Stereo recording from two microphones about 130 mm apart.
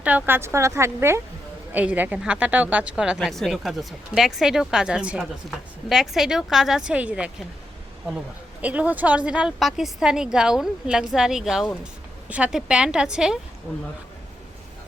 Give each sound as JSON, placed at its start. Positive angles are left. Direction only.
{"t": 0.0, "sound": "a woman's voice", "side_deg": -10}
{"t": 8.6, "sound": "a woman's voice", "side_deg": -10}